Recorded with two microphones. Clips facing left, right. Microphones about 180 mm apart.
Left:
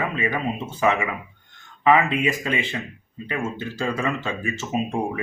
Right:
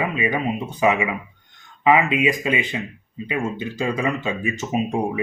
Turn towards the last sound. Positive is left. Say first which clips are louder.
# right 3 dB
turn(degrees=-15)  # may be behind; listen again after turning